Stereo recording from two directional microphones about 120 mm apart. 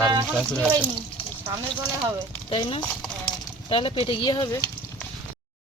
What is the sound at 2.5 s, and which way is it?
Speech, 40° left (ahead or behind).